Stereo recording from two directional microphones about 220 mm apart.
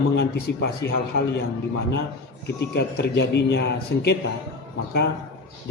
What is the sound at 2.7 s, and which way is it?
A man's voice, 50° left (ahead or behind).